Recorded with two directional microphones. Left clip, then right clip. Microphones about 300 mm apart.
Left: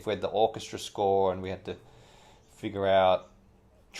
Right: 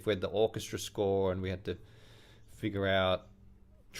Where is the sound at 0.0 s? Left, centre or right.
Right.